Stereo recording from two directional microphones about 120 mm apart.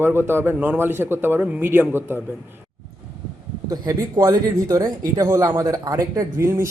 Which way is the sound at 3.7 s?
30° right (ahead or behind).